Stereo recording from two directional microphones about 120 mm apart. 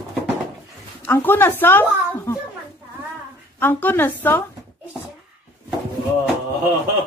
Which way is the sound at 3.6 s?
15° left (ahead or behind).